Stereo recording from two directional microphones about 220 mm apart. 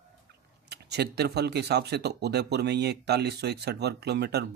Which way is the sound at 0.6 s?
50° right (ahead or behind).